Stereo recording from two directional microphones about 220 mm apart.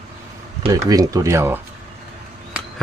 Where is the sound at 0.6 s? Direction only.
15° right (ahead or behind).